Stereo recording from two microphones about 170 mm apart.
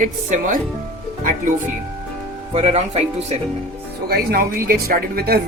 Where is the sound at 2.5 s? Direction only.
40° right (ahead or behind).